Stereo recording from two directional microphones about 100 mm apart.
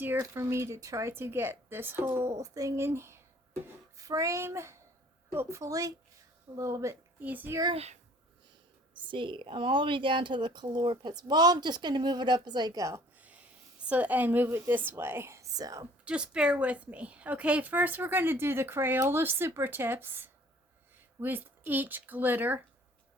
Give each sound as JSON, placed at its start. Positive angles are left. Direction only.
{"t": 0.2, "sound": "a woman's voice", "side_deg": -30}
{"t": 7.2, "sound": "a child's voice", "side_deg": -15}
{"t": 7.7, "sound": "a child's voice", "side_deg": -90}
{"t": 9.0, "sound": "speech", "side_deg": -55}
{"t": 13.1, "sound": "a sound", "side_deg": -15}
{"t": 13.8, "sound": "a woman's voice", "side_deg": -15}
{"t": 15.5, "sound": "speech", "side_deg": -40}
{"t": 16.0, "sound": "a woman's voice", "side_deg": -10}